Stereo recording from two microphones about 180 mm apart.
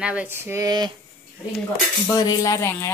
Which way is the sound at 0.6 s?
20° right (ahead or behind).